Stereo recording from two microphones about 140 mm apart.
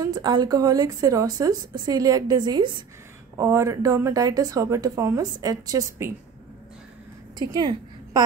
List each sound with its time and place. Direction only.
0.0 s speech: 30° right (ahead or behind)
3.3 s speech: 20° right (ahead or behind)
7.3 s a woman's voice: 30° right (ahead or behind)